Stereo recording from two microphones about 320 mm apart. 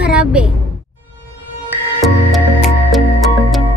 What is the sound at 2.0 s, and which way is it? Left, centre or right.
Music, centre.